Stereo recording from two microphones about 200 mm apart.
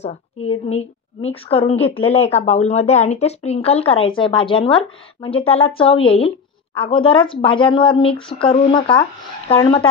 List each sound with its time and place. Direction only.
0.0 s a woman's voice: 30° left (ahead or behind)